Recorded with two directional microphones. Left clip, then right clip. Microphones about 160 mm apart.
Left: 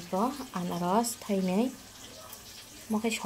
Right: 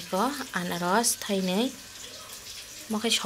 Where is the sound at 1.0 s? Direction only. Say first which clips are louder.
Right 4 dB; centre (ahead or behind).